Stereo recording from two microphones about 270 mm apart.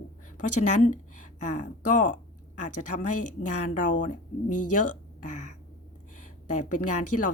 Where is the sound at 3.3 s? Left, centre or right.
Left.